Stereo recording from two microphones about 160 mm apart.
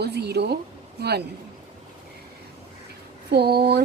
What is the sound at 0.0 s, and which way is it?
A woman's voice, 90° right.